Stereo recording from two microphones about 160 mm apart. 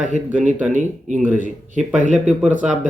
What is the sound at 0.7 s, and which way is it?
Speech, 50° right (ahead or behind).